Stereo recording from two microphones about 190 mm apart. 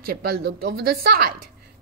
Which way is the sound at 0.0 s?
55° right (ahead or behind).